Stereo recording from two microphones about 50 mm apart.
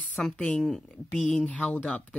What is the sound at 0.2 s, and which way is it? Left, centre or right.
Speech, centre.